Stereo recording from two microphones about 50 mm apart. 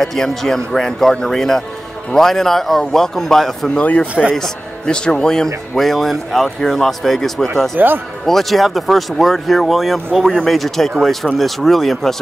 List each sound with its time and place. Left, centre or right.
0.0 s a man's voice: centre
3.8 s speech: left
4.4 s a man's voice: centre
7.7 s a man's voice: right
8.3 s a man's voice: centre